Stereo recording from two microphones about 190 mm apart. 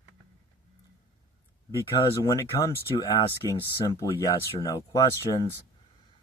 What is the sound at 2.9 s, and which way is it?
Speech, 15° left (ahead or behind).